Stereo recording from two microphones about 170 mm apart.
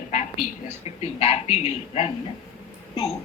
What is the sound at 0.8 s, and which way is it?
A woman's voice, 35° left (ahead or behind).